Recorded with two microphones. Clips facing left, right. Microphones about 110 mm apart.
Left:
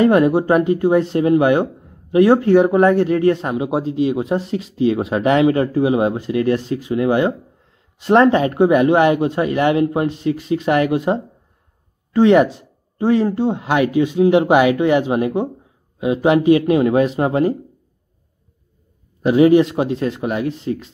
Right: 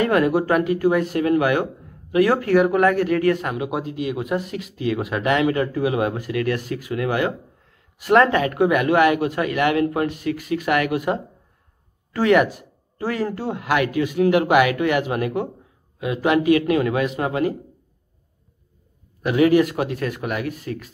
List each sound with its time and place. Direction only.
0.0 s a man's voice: 25° left (ahead or behind)
19.2 s a man's voice: 25° left (ahead or behind)